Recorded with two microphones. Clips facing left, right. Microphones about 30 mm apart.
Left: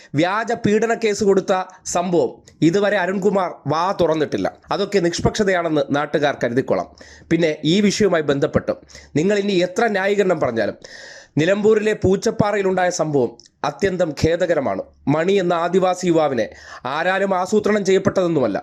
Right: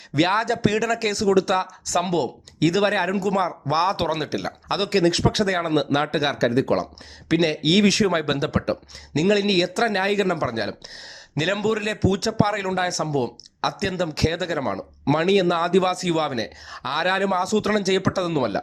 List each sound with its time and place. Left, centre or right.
0.1 s speech: right
3.7 s speech: right
8.0 s speech: right
11.9 s speech: right
12.4 s speech: right
12.9 s speech: right
15.0 s speech: right
17.4 s speech: right